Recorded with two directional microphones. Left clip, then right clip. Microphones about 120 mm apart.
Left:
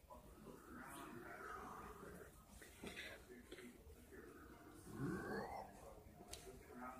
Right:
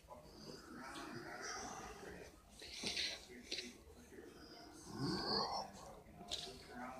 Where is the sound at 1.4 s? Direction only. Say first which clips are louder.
Right 5 dB; 25° left (ahead or behind).